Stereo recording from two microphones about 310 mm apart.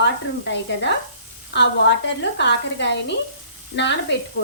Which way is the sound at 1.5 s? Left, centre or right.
Left.